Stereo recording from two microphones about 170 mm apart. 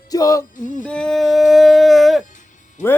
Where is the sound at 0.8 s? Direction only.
5° left (ahead or behind).